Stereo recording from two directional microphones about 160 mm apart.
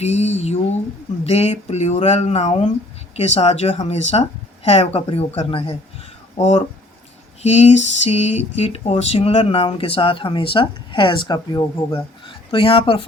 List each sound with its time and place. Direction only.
0.0 s female singing: 40° left (ahead or behind)
1.2 s speech: 40° left (ahead or behind)
7.4 s female singing: 45° left (ahead or behind)
8.5 s speech: 40° left (ahead or behind)